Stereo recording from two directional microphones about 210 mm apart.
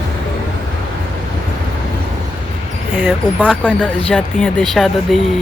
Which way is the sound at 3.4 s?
5° left (ahead or behind).